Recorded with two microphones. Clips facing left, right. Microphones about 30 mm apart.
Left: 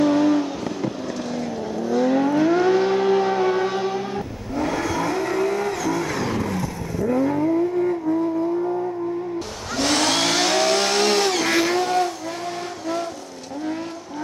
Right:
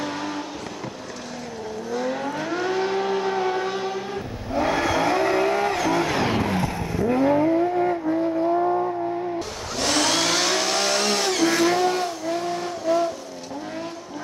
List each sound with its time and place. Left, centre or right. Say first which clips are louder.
0.0 s vehicle: left 11 dB; centre
1.9 s vehicle: left 8 dB; centre
4.6 s vehicle: right 2 dB; right
8.5 s vehicle: right 2 dB; right
9.8 s vehicle: left 2 dB; centre